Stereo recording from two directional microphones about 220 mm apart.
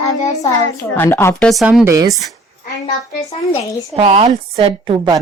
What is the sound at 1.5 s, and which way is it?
Speech, centre (ahead or behind).